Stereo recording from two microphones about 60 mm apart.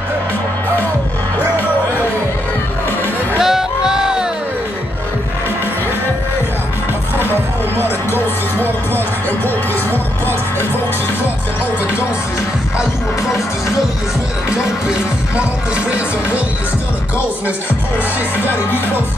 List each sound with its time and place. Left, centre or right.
3.3 s music: centre
8.1 s music: left
9.8 s music: right
14.6 s music: centre